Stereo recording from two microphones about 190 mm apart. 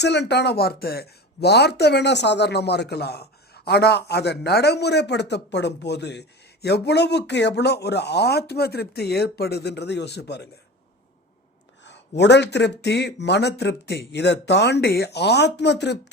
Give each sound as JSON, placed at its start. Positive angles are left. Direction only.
{"t": 0.0, "sound": "speech", "side_deg": 65}
{"t": 11.8, "sound": "speech", "side_deg": 65}